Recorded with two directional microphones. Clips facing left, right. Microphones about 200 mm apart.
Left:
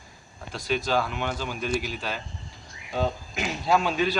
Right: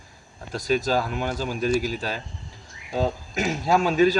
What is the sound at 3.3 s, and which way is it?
Speech, 45° right (ahead or behind).